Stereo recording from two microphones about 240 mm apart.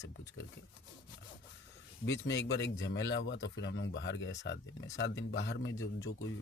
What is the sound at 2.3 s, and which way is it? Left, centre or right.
Speech, left.